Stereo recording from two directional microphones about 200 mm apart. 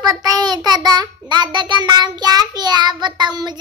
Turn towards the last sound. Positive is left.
turn(degrees=-20)  # may be behind; listen again after turning